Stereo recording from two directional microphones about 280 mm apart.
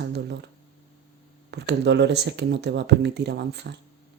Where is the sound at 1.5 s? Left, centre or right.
Right.